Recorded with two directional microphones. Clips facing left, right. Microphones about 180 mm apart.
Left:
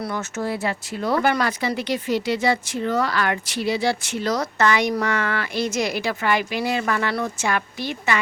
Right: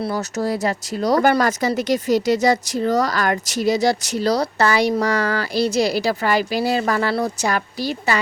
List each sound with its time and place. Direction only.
0.0 s speech: 35° right (ahead or behind)